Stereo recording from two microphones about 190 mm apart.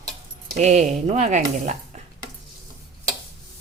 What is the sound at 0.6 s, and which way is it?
Speech, 40° right (ahead or behind).